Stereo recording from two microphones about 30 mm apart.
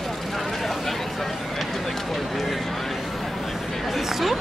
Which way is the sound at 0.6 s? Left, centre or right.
Centre.